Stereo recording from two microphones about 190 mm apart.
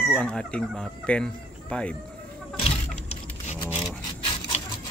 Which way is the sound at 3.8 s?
25° left (ahead or behind).